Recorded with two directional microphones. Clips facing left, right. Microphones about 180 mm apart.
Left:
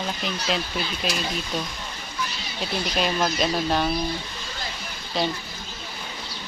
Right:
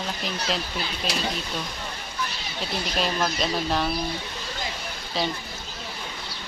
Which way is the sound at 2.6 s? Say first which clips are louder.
Left 2 dB; 5° left (ahead or behind).